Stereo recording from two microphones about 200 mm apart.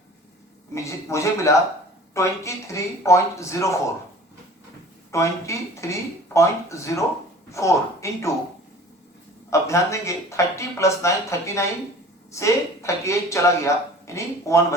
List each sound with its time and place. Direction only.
0.7 s speech: 15° left (ahead or behind)
5.1 s speech: 15° left (ahead or behind)
9.5 s speech: 15° left (ahead or behind)